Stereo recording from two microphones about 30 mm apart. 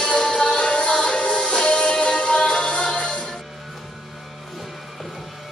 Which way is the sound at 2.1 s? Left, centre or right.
Left.